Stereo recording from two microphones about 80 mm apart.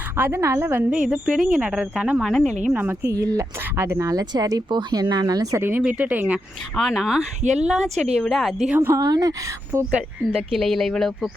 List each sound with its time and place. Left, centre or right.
0.2 s a woman's voice: right
0.9 s speech: centre
2.7 s a woman's voice: right
3.1 s speech: right
4.1 s speech: right
5.5 s a woman's voice: right
5.8 s speech: centre
6.7 s speech: centre
9.0 s speech: right
9.7 s a woman's voice: right
10.5 s speech: centre